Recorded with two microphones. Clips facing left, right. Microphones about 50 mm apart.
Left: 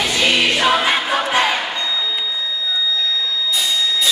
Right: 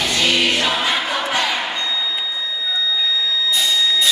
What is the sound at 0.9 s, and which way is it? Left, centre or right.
Choir, left.